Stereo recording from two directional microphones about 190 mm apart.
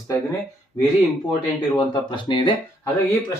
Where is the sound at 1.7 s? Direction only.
25° left (ahead or behind).